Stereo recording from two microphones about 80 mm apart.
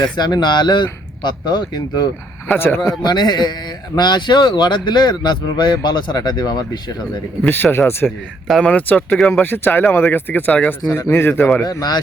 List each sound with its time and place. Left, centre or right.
0.0 s speech: left
2.6 s speech: left
3.0 s speech: left
7.4 s speech: left
10.9 s speech: left
11.6 s speech: left